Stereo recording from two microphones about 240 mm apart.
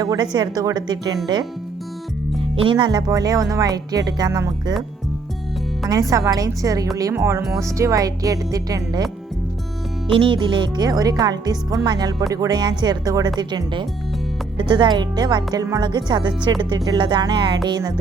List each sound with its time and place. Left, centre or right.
0.0 s speech: centre
2.4 s speech: right
5.9 s speech: centre
10.1 s speech: right